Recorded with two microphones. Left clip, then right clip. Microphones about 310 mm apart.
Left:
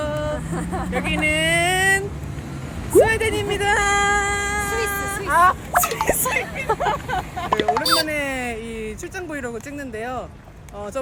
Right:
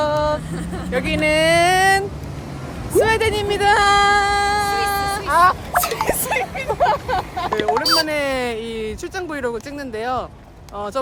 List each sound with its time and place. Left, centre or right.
0.0 s vehicle: centre
0.9 s a sound: centre
3.0 s female singing: centre
5.7 s speech: centre
6.3 s speech: centre
7.5 s speech: centre
8.0 s speech: centre